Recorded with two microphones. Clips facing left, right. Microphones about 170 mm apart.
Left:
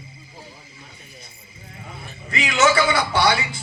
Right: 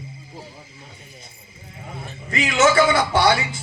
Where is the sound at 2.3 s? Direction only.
45° right (ahead or behind).